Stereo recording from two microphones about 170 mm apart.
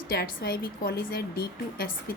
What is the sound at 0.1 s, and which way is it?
A woman's voice, 65° left (ahead or behind).